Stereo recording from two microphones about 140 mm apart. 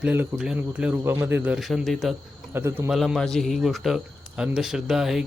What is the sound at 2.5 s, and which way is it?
Speech, 15° right (ahead or behind).